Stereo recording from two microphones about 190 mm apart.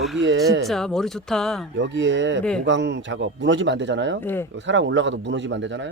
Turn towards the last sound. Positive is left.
turn(degrees=-70)  # may be behind; listen again after turning